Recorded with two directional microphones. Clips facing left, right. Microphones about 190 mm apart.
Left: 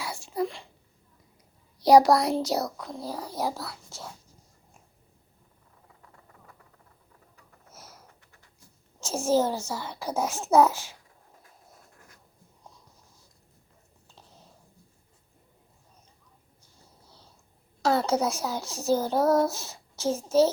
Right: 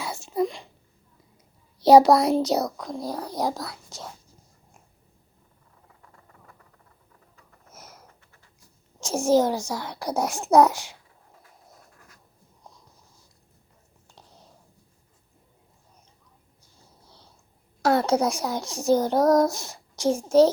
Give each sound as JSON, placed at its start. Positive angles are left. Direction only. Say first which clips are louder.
{"t": 0.0, "sound": "wail", "louder": "right 4 dB", "side_deg": -25}
{"t": 1.8, "sound": "a child's voice", "louder": "right 3 dB", "side_deg": -25}
{"t": 7.7, "sound": "bird", "louder": "right 2 dB", "side_deg": -20}
{"t": 9.0, "sound": "a child's voice", "louder": "right 4 dB", "side_deg": -15}
{"t": 17.9, "sound": "a child's voice", "louder": "right 4 dB", "side_deg": -15}